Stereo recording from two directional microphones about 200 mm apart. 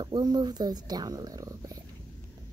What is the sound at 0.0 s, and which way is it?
Speech, 20° right (ahead or behind).